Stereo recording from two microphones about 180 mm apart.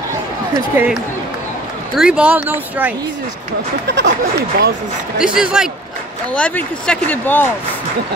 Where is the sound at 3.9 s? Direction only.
75° right (ahead or behind).